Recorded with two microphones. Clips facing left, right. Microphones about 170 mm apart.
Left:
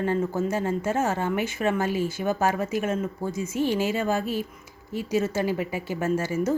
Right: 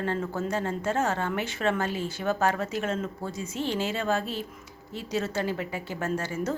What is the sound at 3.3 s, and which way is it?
Speech, 35° right (ahead or behind).